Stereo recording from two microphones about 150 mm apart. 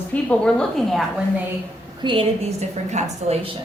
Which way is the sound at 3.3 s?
50° right (ahead or behind).